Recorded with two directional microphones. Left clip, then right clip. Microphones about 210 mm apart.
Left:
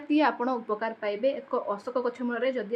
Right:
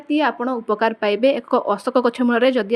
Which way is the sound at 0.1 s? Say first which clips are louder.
Right 5 dB; 20° right (ahead or behind).